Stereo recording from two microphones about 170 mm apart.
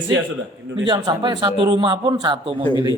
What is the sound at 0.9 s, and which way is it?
Speech, 25° right (ahead or behind).